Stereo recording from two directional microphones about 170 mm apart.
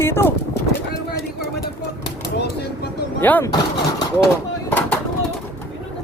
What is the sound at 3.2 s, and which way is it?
Speech, 10° left (ahead or behind).